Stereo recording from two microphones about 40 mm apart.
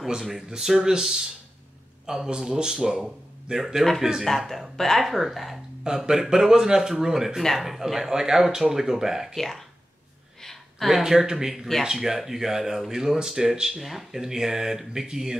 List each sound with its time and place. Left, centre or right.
0.4 s speech: centre
4.2 s speech: centre
5.0 s speech: centre
5.9 s speech: centre
9.4 s speech: centre
10.4 s a sound: centre
10.9 s speech: centre